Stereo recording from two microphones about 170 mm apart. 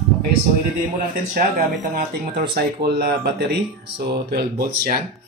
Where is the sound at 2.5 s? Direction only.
65° right (ahead or behind).